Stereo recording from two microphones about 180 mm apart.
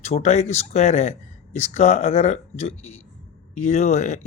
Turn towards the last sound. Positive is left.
turn(degrees=40)  # may be behind; listen again after turning